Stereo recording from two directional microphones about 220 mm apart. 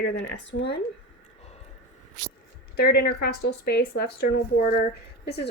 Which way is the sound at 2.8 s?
45° left (ahead or behind).